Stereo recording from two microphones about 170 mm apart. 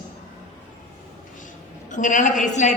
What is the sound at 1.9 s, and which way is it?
Speech, 45° left (ahead or behind).